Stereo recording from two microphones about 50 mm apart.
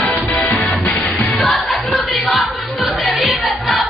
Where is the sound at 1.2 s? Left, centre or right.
Centre.